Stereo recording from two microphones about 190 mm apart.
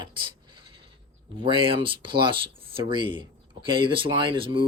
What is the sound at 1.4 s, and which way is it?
Speech, 25° right (ahead or behind).